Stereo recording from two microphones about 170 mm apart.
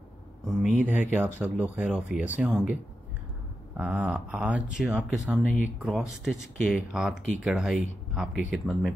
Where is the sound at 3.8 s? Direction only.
10° right (ahead or behind).